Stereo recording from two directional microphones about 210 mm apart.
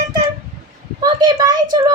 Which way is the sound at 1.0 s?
20° right (ahead or behind).